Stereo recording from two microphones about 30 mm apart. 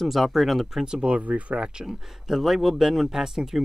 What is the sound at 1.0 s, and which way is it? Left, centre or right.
Speech, right.